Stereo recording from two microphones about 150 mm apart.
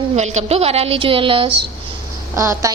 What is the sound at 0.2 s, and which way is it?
A woman's voice, 45° right (ahead or behind).